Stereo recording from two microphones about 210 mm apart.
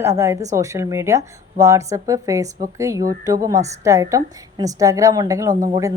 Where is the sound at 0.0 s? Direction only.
15° right (ahead or behind).